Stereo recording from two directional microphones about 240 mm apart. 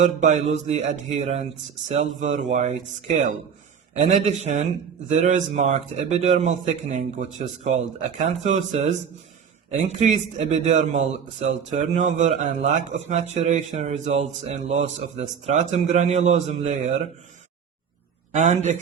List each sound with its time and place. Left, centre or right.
0.0 s a man's voice: right
3.9 s a man's voice: right
18.3 s a man's voice: right